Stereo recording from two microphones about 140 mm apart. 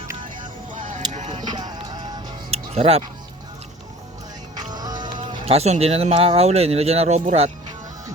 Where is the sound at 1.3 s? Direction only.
30° right (ahead or behind).